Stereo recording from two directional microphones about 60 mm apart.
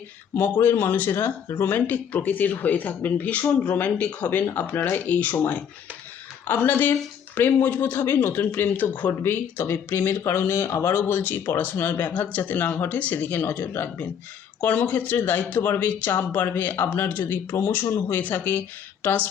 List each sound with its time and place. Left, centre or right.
0.3 s speech: left
10.9 s speech: left
14.6 s speech: left